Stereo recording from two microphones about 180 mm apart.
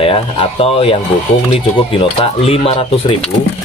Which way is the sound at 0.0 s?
30° left (ahead or behind).